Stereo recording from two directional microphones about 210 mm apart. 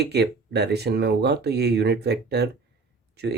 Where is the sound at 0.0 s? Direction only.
50° right (ahead or behind).